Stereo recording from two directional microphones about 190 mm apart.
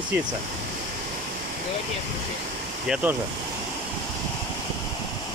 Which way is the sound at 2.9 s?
10° right (ahead or behind).